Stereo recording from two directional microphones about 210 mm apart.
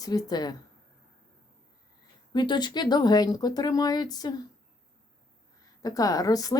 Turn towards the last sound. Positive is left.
turn(degrees=15)  # may be behind; listen again after turning